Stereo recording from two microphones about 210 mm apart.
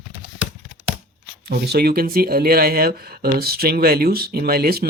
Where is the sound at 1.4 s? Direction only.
50° right (ahead or behind).